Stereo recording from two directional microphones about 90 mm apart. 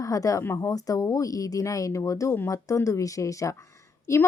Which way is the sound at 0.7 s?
40° left (ahead or behind).